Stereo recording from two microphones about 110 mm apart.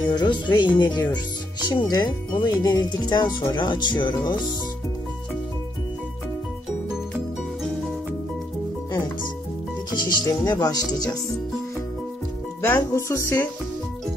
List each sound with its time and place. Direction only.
0.1 s speech: 40° left (ahead or behind)
9.9 s speech: 40° left (ahead or behind)
12.6 s music: 25° left (ahead or behind)